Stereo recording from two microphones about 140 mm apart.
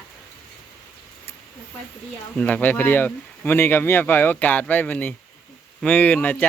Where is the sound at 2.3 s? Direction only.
10° left (ahead or behind).